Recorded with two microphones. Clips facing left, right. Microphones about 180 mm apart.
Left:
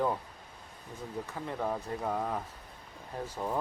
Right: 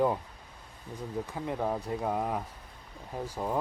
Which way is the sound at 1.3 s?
15° right (ahead or behind).